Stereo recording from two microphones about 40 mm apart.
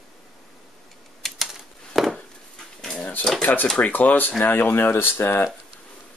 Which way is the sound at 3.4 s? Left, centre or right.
Left.